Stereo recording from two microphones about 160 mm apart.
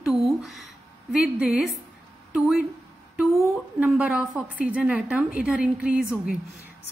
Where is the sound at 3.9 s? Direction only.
5° right (ahead or behind).